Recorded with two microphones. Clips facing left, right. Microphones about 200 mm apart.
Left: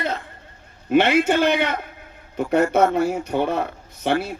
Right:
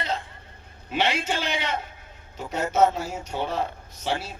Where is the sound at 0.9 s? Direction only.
55° left (ahead or behind).